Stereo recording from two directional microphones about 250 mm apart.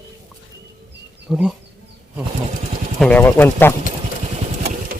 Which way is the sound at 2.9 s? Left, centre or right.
Centre.